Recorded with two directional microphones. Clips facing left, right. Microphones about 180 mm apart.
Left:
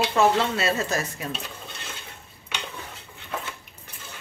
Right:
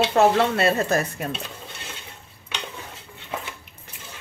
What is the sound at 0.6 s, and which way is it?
Speech, 55° right (ahead or behind).